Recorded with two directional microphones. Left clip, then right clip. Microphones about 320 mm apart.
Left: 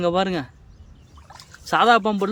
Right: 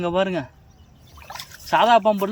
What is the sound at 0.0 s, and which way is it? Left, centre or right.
Speech, centre.